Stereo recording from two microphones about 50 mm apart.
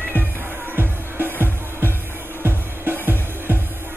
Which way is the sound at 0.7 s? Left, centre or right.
Right.